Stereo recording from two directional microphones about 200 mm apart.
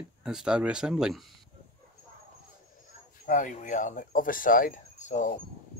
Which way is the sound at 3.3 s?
40° left (ahead or behind).